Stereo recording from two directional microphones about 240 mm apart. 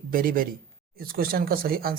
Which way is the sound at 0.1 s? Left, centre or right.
Right.